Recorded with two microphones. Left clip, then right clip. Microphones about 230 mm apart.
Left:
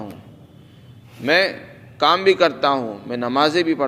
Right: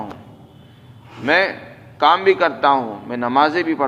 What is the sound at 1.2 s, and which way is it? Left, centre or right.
A man's voice, left.